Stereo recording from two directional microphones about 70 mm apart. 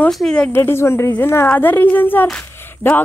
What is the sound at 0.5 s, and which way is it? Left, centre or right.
Speech, left.